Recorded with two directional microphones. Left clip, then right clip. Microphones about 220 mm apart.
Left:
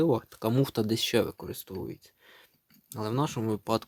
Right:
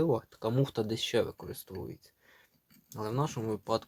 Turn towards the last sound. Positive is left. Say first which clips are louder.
# left 3 dB
turn(degrees=40)  # may be behind; listen again after turning